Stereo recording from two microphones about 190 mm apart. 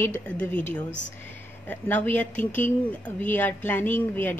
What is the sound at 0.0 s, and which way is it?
Speech, 10° left (ahead or behind).